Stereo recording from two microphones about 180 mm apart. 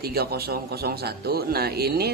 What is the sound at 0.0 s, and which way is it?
A man's voice, 60° right (ahead or behind).